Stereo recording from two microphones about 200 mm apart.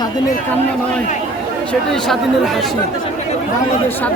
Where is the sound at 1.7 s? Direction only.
5° left (ahead or behind).